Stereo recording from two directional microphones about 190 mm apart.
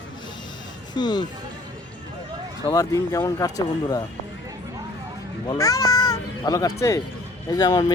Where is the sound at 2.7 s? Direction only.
20° left (ahead or behind).